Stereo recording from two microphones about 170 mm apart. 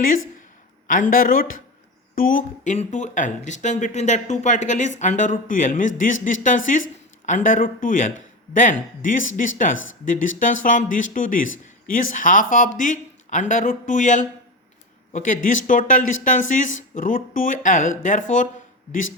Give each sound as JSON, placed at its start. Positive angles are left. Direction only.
{"t": 0.9, "sound": "speech", "side_deg": 50}